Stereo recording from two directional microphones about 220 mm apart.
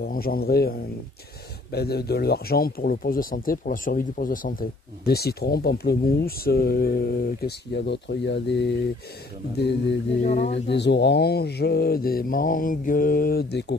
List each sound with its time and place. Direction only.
0.0 s speech: 40° left (ahead or behind)